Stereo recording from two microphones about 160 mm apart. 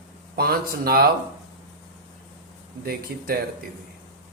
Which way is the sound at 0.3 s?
75° right (ahead or behind).